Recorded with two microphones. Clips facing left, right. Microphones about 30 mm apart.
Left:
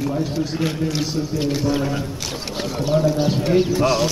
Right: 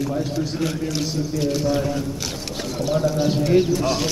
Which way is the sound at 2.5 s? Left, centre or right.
Centre.